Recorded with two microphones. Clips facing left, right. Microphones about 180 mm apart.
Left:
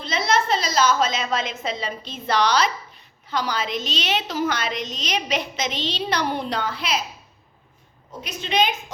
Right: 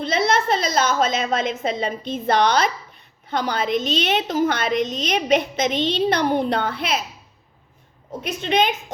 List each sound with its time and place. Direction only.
0.0 s a woman's voice: 55° right (ahead or behind)
8.2 s a woman's voice: 55° right (ahead or behind)